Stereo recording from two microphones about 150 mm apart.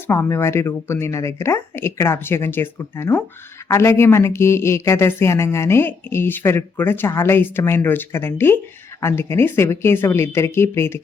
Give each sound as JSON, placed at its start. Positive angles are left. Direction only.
{"t": 0.1, "sound": "speech", "side_deg": 15}